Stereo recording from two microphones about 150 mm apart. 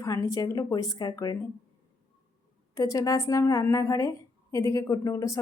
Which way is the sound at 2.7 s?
20° left (ahead or behind).